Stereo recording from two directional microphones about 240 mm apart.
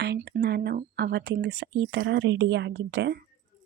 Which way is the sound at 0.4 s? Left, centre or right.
Right.